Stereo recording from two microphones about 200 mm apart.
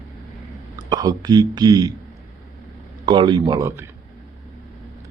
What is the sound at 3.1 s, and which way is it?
Speech, 25° right (ahead or behind).